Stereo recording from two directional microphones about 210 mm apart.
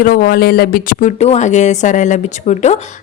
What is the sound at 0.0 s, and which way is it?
Speech, 40° left (ahead or behind).